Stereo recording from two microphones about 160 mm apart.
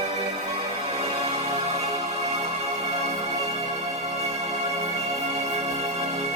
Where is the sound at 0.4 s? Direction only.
40° right (ahead or behind).